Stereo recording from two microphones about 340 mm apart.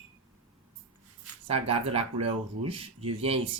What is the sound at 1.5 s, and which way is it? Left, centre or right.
Speech, centre.